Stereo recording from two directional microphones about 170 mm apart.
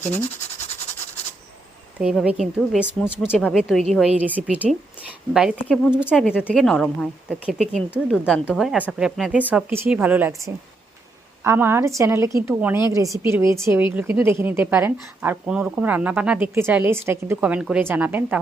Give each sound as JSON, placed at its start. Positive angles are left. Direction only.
{"t": 2.0, "sound": "speech", "side_deg": -5}
{"t": 6.2, "sound": "speech", "side_deg": 10}
{"t": 11.4, "sound": "speech", "side_deg": -15}